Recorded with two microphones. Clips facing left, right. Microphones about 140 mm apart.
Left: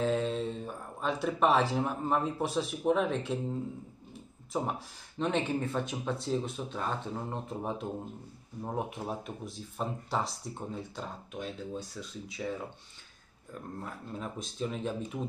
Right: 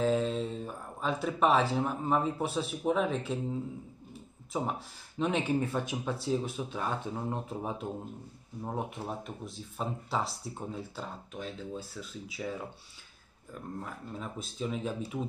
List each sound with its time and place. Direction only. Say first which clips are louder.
0.0 s speech: right 1 dB; centre (ahead or behind)
13.7 s speech: left 1 dB; centre (ahead or behind)